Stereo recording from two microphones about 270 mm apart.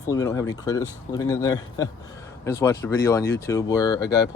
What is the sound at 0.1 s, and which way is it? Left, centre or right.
Speech, centre.